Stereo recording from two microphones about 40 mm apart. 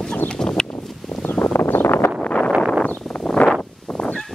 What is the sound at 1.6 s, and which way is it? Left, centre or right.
Wind noise, left.